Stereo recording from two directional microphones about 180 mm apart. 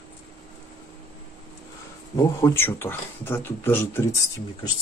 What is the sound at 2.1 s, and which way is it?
Speech, 15° left (ahead or behind).